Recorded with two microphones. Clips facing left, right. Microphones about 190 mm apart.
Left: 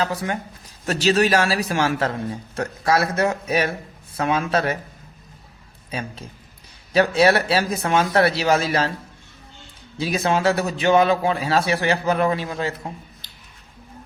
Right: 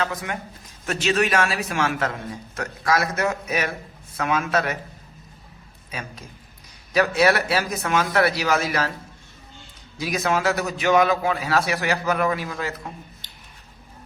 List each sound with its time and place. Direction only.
0.0 s speech: 35° left (ahead or behind)
5.9 s a man's voice: 30° left (ahead or behind)
10.0 s a man's voice: 30° left (ahead or behind)